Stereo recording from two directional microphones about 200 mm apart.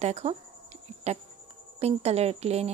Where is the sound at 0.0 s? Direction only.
35° right (ahead or behind).